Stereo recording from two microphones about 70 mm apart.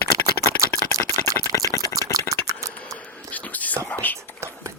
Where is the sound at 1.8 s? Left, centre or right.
Right.